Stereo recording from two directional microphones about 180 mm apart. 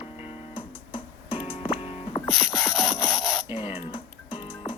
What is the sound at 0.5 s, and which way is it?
Music, 30° left (ahead or behind).